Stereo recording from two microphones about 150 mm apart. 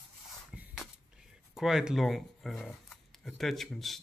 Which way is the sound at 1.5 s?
Centre (ahead or behind).